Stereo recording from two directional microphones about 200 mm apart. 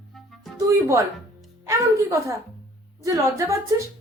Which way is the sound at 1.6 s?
15° right (ahead or behind).